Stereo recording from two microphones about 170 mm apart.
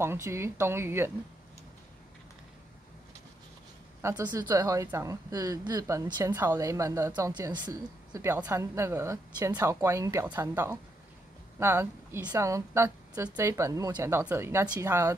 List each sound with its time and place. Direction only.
0.0 s a woman's voice: 15° right (ahead or behind)
4.3 s a woman's voice: 15° right (ahead or behind)